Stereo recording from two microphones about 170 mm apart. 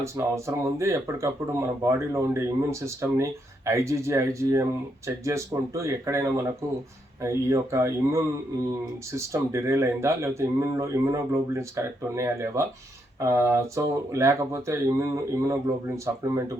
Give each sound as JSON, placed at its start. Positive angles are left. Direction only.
{"t": 0.0, "sound": "speech", "side_deg": -15}